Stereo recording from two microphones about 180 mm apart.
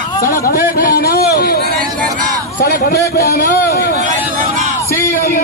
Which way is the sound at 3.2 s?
60° left (ahead or behind).